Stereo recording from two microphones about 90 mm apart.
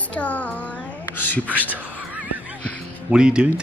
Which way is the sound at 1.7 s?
20° right (ahead or behind).